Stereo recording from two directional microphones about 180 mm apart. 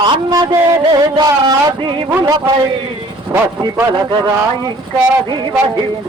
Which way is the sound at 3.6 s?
20° right (ahead or behind).